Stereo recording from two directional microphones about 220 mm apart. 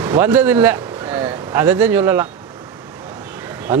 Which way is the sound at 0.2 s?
10° right (ahead or behind).